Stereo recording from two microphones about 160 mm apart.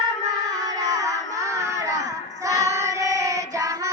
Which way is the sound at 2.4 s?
20° right (ahead or behind).